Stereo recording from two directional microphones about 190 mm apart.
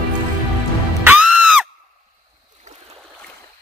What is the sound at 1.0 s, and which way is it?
Music, 5° right (ahead or behind).